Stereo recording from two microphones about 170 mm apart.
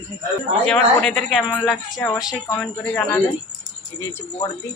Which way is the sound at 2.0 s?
20° left (ahead or behind).